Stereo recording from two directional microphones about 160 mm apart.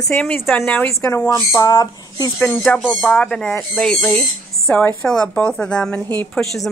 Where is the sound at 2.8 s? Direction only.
5° right (ahead or behind).